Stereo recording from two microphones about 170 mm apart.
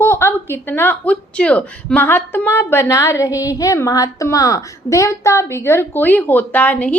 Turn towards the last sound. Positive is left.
turn(degrees=10)  # may be behind; listen again after turning